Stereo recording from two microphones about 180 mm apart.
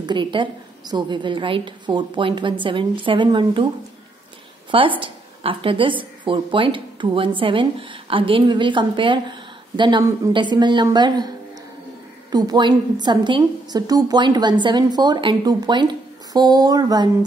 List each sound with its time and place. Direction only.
0.0 s a woman's voice: 25° right (ahead or behind)
4.6 s a woman's voice: 30° right (ahead or behind)